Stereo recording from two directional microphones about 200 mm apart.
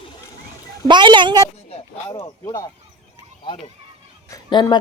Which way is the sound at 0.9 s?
20° right (ahead or behind).